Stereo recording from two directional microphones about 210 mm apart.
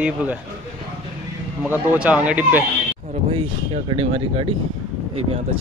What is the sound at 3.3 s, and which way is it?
Speech, 25° right (ahead or behind).